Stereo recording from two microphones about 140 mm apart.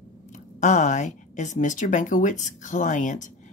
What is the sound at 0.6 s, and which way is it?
A woman's voice, 60° left (ahead or behind).